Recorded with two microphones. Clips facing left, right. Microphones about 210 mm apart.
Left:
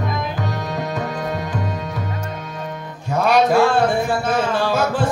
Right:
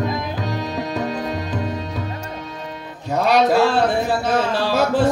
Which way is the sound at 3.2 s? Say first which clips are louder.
Left 1 dB; 50° left (ahead or behind).